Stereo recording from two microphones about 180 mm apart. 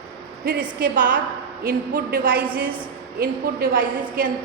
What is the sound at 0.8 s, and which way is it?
A woman's voice, 50° right (ahead or behind).